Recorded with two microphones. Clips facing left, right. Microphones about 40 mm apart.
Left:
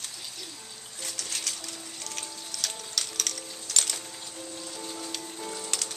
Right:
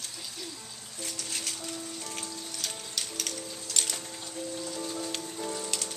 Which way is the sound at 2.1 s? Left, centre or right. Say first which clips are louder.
Right 1 dB; right.